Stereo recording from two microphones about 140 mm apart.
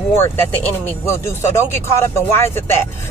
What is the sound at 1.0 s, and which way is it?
Speech, 15° left (ahead or behind).